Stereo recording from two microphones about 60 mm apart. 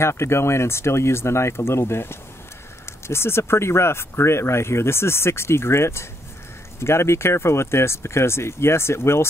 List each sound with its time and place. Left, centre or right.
0.0 s speech: left